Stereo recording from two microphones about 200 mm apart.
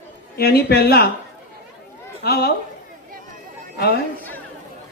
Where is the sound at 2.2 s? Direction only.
50° left (ahead or behind).